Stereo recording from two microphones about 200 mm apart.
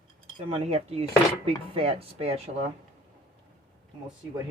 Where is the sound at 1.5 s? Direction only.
30° right (ahead or behind).